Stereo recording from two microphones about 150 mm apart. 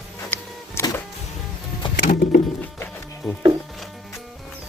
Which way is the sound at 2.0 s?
60° left (ahead or behind).